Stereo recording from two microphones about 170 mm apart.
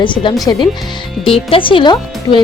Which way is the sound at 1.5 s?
30° left (ahead or behind).